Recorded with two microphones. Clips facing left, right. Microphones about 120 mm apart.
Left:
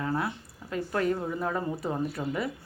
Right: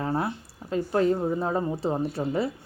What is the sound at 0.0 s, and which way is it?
Speech, 30° right (ahead or behind).